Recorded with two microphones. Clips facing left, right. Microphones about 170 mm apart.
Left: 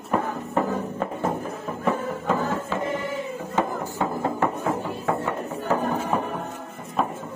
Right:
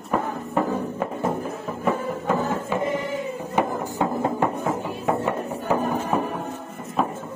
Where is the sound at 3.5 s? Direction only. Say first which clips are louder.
Right 2 dB; 20° right (ahead or behind).